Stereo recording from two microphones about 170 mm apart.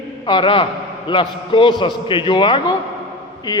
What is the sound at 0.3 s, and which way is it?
A man's voice, 30° left (ahead or behind).